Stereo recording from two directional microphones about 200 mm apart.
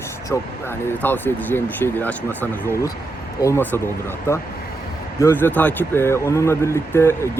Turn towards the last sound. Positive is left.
turn(degrees=15)  # may be behind; listen again after turning